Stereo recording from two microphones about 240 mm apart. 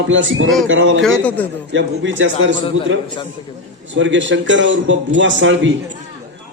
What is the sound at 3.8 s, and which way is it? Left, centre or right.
A man's voice, right.